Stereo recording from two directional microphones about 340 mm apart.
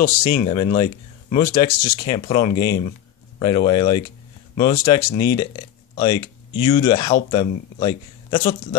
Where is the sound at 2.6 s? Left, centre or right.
Left.